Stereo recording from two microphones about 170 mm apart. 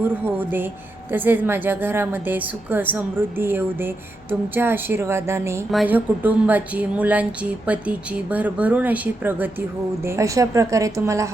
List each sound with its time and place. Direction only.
0.3 s a woman's voice: 10° right (ahead or behind)